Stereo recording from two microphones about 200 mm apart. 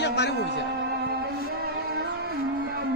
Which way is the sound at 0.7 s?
55° right (ahead or behind).